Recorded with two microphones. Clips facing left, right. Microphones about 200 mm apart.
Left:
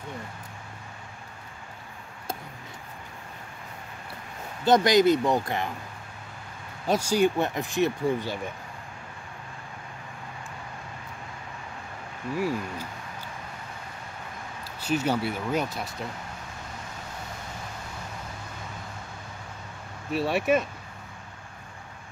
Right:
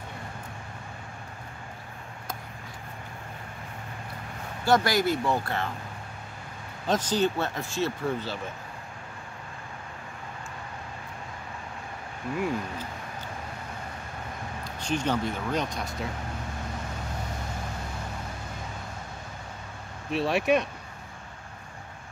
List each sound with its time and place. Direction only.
4.6 s speech: 20° left (ahead or behind)
6.9 s speech: 10° left (ahead or behind)
14.6 s speech: 5° left (ahead or behind)
20.1 s speech: centre (ahead or behind)